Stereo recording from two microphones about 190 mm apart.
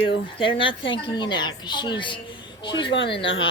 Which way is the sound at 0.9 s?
25° left (ahead or behind).